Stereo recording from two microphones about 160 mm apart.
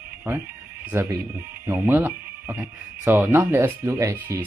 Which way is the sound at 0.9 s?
15° right (ahead or behind).